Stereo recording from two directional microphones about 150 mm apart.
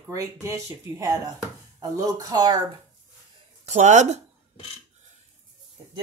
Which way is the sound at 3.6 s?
50° right (ahead or behind).